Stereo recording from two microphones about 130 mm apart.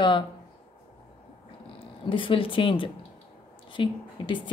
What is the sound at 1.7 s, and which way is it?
A woman's voice, 40° left (ahead or behind).